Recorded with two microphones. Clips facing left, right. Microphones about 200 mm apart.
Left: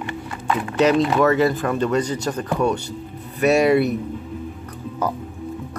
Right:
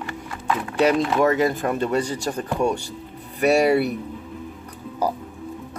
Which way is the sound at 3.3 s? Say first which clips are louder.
Left 2 dB; 10° right (ahead or behind).